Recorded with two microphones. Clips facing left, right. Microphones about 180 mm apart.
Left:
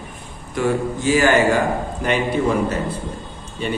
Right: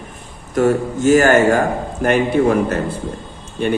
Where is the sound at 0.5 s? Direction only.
45° right (ahead or behind).